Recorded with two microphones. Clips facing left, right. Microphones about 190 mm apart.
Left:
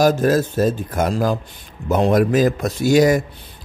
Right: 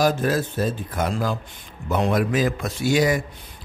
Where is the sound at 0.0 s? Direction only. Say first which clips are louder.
Left 5 dB; 45° left (ahead or behind).